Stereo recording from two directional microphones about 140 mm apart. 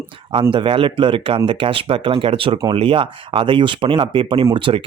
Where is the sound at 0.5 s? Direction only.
40° right (ahead or behind).